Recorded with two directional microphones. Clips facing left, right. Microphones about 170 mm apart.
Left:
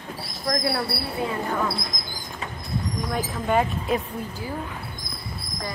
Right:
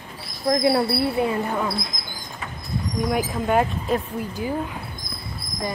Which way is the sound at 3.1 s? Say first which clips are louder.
Right 2 dB; centre (ahead or behind).